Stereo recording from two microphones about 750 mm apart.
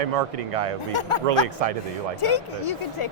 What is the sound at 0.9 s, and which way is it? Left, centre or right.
Speech, left.